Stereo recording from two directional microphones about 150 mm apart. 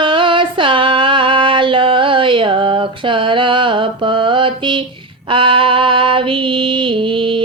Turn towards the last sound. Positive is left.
turn(degrees=-35)  # may be behind; listen again after turning